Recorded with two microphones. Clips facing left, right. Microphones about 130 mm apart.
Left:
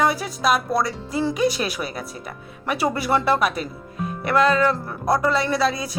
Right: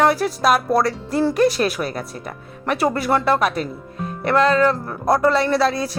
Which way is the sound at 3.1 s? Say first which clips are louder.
Even; 45° right (ahead or behind).